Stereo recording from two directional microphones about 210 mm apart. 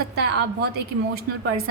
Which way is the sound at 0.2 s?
50° right (ahead or behind).